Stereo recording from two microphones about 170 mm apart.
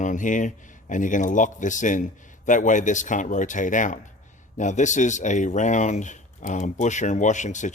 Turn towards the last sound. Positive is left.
turn(degrees=45)  # may be behind; listen again after turning